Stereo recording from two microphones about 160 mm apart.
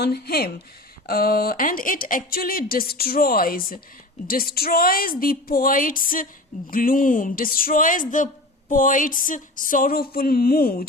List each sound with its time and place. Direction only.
0.0 s a woman's voice: 80° left